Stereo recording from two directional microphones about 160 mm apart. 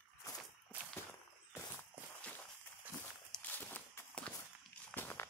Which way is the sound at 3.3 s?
10° left (ahead or behind).